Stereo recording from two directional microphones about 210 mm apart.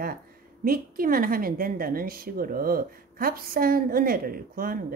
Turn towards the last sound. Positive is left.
turn(degrees=-40)  # may be behind; listen again after turning